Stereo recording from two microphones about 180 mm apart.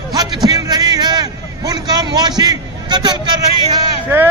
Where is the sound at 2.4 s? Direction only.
25° right (ahead or behind).